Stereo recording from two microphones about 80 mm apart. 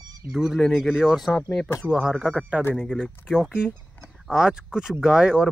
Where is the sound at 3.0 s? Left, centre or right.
Centre.